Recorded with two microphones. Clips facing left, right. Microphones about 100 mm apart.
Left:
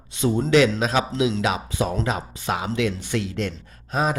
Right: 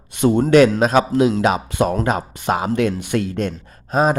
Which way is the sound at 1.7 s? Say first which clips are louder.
Right 6 dB; 60° right (ahead or behind).